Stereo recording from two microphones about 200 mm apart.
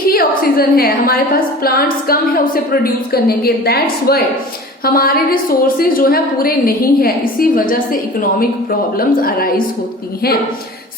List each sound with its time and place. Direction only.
0.1 s a woman's voice: 50° left (ahead or behind)
9.0 s a woman's voice: 45° left (ahead or behind)